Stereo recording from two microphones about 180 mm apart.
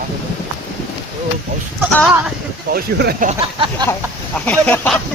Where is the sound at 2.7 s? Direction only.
55° right (ahead or behind).